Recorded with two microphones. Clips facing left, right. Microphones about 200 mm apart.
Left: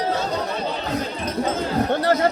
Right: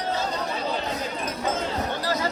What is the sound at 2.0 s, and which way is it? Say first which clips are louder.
Chatter: left 8 dB; 60° left (ahead or behind).